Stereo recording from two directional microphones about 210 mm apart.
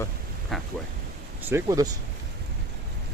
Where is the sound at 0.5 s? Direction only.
Centre (ahead or behind).